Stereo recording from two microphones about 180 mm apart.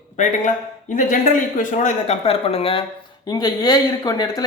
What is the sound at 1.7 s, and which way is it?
Speech, 45° left (ahead or behind).